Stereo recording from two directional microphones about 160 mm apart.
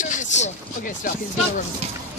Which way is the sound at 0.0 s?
50° left (ahead or behind).